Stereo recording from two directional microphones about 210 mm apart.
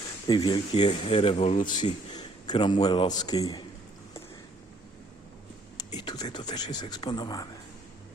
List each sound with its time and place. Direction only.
0.3 s speech: 20° left (ahead or behind)
5.7 s speech: 20° left (ahead or behind)